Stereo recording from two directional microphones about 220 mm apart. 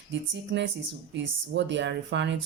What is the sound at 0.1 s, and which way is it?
A woman's voice, 55° right (ahead or behind).